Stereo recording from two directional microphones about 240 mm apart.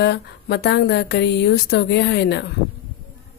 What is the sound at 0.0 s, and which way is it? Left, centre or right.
Speech, left.